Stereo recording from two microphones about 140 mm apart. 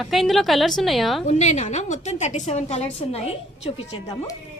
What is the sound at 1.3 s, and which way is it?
Speech, 55° left (ahead or behind).